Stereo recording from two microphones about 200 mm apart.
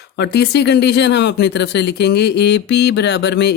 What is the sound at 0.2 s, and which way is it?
Speech, 60° left (ahead or behind).